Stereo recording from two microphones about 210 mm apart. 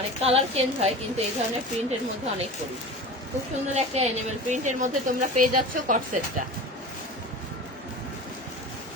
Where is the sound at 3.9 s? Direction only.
30° right (ahead or behind).